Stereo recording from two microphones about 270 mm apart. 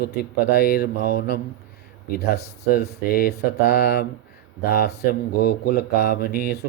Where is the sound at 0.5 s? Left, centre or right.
Left.